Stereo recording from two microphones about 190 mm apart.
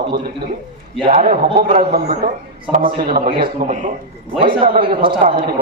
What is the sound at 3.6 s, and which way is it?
Speech, 40° right (ahead or behind).